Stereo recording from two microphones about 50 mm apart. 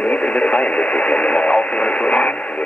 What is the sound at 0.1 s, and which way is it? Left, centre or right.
Radio, left.